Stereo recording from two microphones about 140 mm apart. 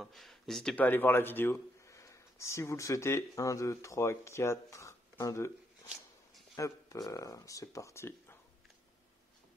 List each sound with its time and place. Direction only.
0.0 s speech: centre (ahead or behind); by 5.5 s 20° left (ahead or behind)
6.5 s speech: 25° left (ahead or behind)